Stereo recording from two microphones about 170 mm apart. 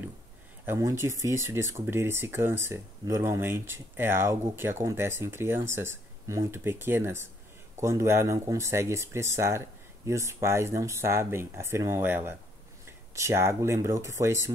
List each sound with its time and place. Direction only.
0.7 s speech: 15° right (ahead or behind)